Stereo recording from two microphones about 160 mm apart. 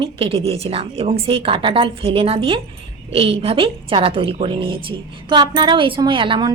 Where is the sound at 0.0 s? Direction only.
35° right (ahead or behind).